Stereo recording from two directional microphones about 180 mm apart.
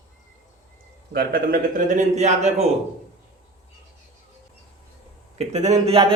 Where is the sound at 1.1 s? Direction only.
55° right (ahead or behind).